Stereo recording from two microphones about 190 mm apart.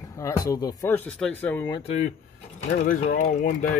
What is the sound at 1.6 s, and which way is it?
Speech, 25° left (ahead or behind).